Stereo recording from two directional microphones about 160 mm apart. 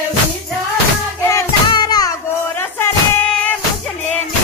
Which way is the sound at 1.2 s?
20° left (ahead or behind).